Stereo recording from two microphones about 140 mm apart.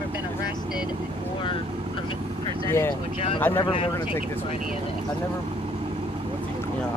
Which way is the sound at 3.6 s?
40° left (ahead or behind).